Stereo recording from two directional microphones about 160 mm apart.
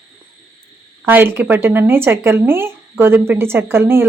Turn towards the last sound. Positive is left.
turn(degrees=-15)  # may be behind; listen again after turning